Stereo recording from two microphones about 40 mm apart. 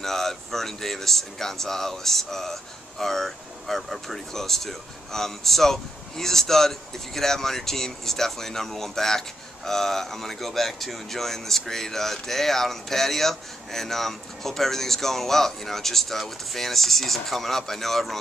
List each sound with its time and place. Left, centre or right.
0.0 s speech: centre